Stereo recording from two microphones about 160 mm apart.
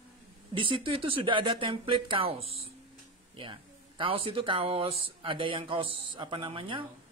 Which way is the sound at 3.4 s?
30° right (ahead or behind).